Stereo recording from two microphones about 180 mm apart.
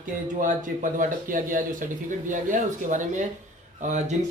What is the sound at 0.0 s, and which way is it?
Speech, 45° right (ahead or behind).